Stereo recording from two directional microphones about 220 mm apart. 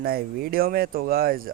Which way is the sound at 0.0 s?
45° right (ahead or behind).